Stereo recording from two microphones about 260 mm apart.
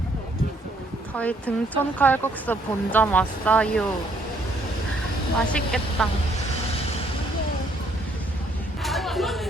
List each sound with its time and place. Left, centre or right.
1.1 s speech: centre
5.5 s speech: centre
8.8 s a sound: centre